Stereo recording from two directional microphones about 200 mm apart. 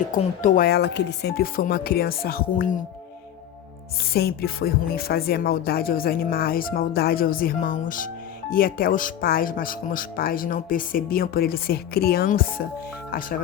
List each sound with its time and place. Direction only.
0.1 s speech: 40° left (ahead or behind)
4.1 s speech: 50° left (ahead or behind)